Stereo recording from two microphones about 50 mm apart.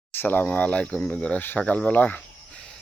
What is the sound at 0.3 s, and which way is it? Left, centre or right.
Speech, left.